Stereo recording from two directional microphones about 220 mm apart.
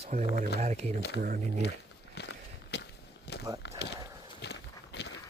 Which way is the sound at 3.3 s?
50° left (ahead or behind).